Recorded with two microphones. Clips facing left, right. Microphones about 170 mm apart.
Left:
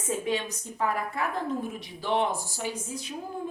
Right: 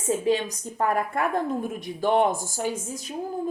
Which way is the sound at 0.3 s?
40° right (ahead or behind).